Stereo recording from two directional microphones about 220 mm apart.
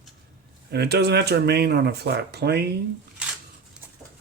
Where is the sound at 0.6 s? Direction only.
50° right (ahead or behind).